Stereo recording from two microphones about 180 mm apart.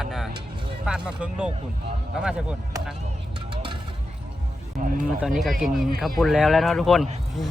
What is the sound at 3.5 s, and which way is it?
Vehicle, 25° right (ahead or behind).